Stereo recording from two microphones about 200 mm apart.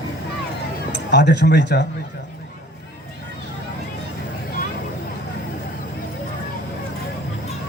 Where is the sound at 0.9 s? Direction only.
60° left (ahead or behind).